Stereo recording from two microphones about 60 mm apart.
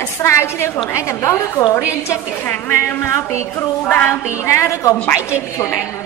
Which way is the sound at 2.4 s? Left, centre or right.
Left.